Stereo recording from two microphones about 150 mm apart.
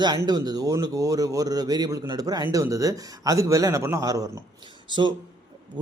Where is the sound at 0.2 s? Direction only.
25° right (ahead or behind).